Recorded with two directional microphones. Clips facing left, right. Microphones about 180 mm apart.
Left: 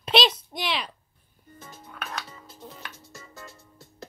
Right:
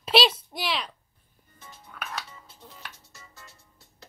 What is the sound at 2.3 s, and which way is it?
Music, 40° left (ahead or behind).